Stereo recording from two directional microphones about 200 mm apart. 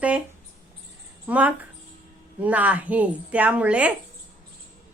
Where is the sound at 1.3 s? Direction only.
5° right (ahead or behind).